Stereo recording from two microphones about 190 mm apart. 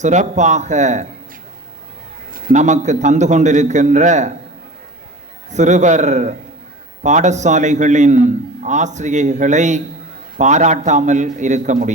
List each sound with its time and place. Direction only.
0.0 s a man's voice: 40° right (ahead or behind)
2.3 s a man's voice: 40° right (ahead or behind)
5.5 s a man's voice: 40° right (ahead or behind)